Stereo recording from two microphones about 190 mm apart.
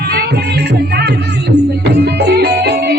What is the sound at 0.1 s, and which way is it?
Music, 60° right (ahead or behind).